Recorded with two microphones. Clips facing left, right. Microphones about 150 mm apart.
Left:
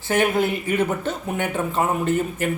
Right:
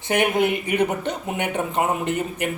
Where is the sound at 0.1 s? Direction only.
15° right (ahead or behind).